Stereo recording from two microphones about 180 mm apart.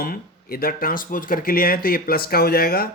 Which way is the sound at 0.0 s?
55° left (ahead or behind).